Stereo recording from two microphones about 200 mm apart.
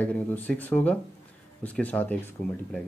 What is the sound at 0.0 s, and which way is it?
Speech, 10° left (ahead or behind).